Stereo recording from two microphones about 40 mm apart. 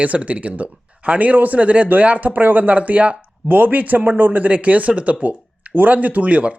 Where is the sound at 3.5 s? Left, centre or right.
Right.